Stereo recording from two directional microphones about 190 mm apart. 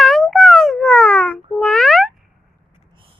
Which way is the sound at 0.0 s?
Centre (ahead or behind).